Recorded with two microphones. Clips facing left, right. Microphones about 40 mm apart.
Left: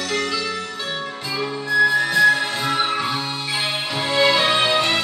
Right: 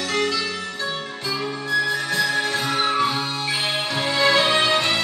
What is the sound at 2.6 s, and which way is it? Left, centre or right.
Music, centre.